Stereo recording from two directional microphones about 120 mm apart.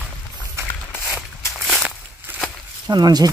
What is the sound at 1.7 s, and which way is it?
Walk, 5° right (ahead or behind).